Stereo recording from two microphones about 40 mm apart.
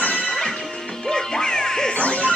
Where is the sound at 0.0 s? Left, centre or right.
Left.